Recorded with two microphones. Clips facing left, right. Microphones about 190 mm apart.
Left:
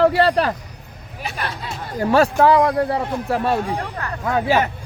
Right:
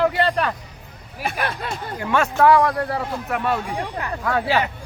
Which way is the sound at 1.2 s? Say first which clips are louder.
Right 3 dB; 55° right (ahead or behind).